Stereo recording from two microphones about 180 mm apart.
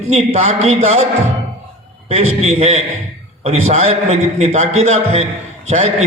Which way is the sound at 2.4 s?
35° right (ahead or behind).